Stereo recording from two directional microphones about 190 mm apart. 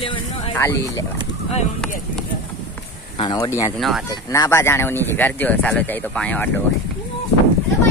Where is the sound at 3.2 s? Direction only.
20° left (ahead or behind).